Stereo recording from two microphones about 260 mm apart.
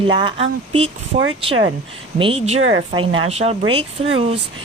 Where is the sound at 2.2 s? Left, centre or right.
Right.